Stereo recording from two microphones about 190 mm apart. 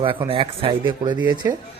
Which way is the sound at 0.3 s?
30° right (ahead or behind).